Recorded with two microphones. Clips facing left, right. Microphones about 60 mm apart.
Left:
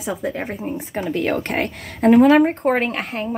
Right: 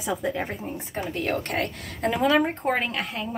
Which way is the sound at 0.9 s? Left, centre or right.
Left.